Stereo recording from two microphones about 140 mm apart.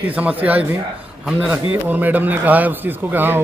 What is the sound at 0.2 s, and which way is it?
A man's voice, 10° right (ahead or behind).